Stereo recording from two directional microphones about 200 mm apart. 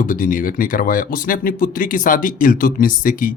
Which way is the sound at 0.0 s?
45° left (ahead or behind).